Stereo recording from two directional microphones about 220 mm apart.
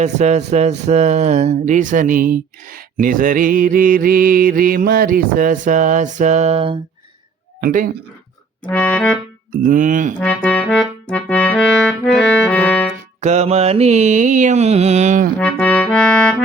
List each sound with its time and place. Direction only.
0.0 s speech: 30° right (ahead or behind)
7.6 s speech: 40° right (ahead or behind)
8.6 s music: 5° left (ahead or behind)
9.5 s speech: 35° right (ahead or behind)
10.2 s music: 5° left (ahead or behind)
13.2 s speech: 30° right (ahead or behind)
15.4 s music: 5° left (ahead or behind)